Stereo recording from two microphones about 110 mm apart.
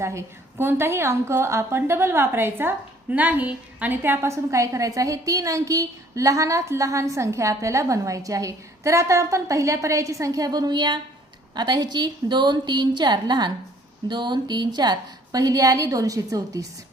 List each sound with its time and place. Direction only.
0.0 s a woman's voice: 25° right (ahead or behind)